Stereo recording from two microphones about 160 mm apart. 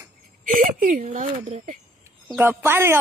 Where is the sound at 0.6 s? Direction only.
55° right (ahead or behind).